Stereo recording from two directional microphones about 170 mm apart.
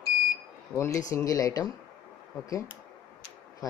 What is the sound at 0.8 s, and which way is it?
Speech, 20° left (ahead or behind).